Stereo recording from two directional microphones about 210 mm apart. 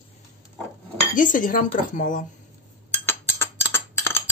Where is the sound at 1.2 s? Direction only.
40° left (ahead or behind).